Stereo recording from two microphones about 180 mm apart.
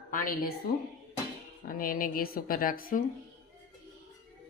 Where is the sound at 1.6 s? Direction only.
50° left (ahead or behind).